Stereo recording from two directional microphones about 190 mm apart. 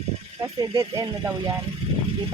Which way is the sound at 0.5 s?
25° right (ahead or behind).